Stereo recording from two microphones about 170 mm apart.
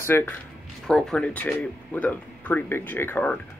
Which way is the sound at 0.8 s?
5° left (ahead or behind).